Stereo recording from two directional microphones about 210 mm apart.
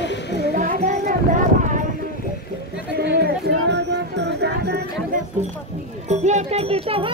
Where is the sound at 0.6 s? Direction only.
35° right (ahead or behind).